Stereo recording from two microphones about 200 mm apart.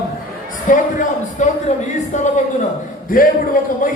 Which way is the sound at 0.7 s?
40° left (ahead or behind).